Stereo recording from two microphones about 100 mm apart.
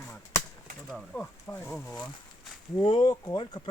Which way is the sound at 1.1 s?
20° left (ahead or behind).